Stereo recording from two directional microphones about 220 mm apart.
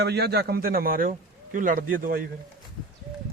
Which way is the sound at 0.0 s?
45° right (ahead or behind).